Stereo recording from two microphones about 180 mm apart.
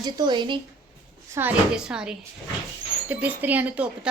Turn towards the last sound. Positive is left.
turn(degrees=-5)  # may be behind; listen again after turning